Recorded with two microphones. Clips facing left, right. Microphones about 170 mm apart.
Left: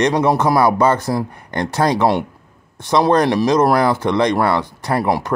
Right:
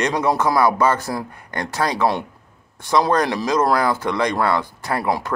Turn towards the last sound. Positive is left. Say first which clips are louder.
# left 4 dB
turn(degrees=20)  # may be behind; listen again after turning